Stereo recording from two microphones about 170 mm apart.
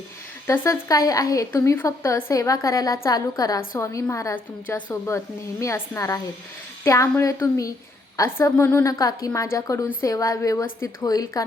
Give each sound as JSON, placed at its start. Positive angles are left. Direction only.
{"t": 0.4, "sound": "a woman's voice", "side_deg": 15}